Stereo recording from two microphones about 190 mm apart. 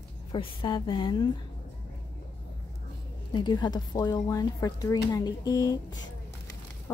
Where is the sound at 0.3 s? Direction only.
25° left (ahead or behind).